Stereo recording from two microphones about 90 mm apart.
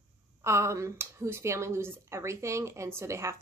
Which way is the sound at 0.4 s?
30° right (ahead or behind).